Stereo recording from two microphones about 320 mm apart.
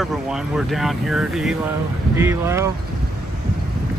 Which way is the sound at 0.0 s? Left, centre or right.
Centre.